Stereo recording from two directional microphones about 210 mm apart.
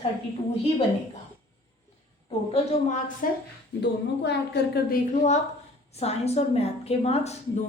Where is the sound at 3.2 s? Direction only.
40° left (ahead or behind).